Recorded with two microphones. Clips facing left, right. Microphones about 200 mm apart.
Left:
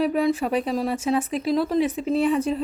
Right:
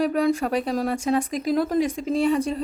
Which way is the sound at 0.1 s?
5° left (ahead or behind).